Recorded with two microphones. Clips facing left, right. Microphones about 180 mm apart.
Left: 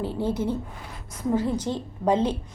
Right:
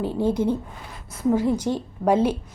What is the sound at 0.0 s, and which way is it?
A woman's voice, 15° right (ahead or behind).